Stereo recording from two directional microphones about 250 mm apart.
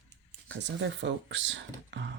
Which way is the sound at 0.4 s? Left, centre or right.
Right.